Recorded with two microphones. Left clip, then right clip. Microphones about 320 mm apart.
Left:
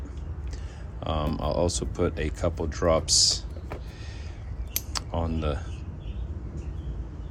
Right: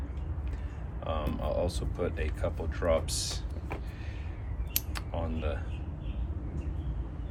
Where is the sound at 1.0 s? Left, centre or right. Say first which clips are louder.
Left 5 dB; left.